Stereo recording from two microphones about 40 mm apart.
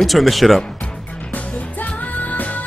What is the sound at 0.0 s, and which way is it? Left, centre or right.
Speech, centre.